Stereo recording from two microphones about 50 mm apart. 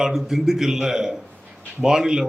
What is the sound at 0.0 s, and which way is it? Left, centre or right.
A man's voice, centre.